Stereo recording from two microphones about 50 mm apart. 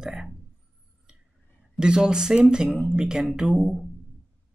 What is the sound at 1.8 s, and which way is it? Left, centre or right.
Speech, centre.